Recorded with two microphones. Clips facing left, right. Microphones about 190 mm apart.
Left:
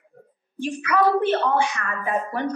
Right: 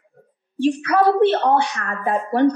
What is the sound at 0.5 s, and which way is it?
A woman's voice, 35° right (ahead or behind).